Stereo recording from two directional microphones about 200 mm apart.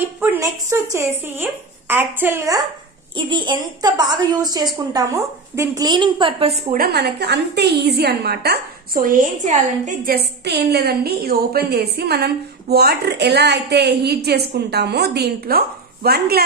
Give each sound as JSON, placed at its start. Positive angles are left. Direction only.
{"t": 0.2, "sound": "a woman's voice", "side_deg": -10}
{"t": 6.8, "sound": "a woman's voice", "side_deg": -55}
{"t": 10.1, "sound": "a woman's voice", "side_deg": -55}